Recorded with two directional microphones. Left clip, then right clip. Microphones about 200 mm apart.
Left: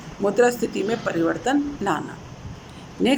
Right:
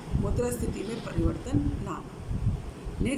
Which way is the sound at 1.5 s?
Centre (ahead or behind).